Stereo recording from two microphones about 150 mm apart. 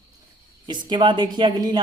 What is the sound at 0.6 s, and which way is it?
Speech, 30° right (ahead or behind).